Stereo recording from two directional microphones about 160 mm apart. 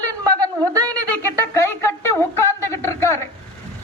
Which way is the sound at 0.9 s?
15° left (ahead or behind).